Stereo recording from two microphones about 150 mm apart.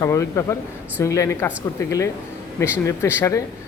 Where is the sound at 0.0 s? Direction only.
20° left (ahead or behind).